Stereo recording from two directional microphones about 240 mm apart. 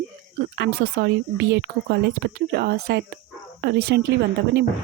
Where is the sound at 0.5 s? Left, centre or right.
Right.